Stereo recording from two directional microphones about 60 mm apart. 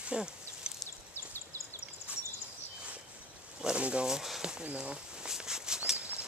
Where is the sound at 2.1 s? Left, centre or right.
Right.